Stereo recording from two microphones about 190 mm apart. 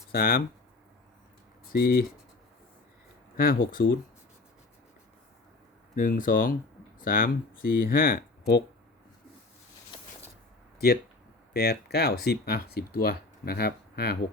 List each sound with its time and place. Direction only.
0.1 s speech: 50° left (ahead or behind)
1.7 s speech: 50° left (ahead or behind)
3.3 s speech: 50° left (ahead or behind)
6.0 s speech: 45° left (ahead or behind)
11.5 s speech: 55° left (ahead or behind)